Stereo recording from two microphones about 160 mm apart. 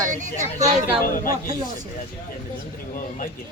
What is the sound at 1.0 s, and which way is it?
Speech, 60° left (ahead or behind).